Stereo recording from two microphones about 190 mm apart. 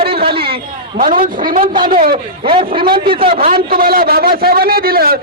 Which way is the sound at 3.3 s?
50° right (ahead or behind).